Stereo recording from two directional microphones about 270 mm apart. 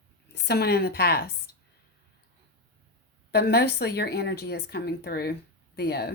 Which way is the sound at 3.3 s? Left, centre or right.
Left.